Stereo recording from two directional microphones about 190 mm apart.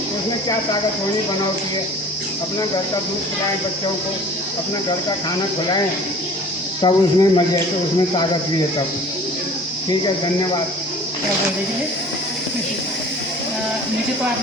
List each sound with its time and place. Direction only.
6.8 s speech: 20° left (ahead or behind)